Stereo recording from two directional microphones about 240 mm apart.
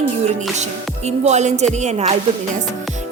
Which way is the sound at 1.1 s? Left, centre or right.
Right.